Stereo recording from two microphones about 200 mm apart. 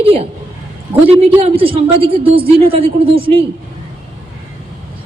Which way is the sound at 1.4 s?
25° right (ahead or behind).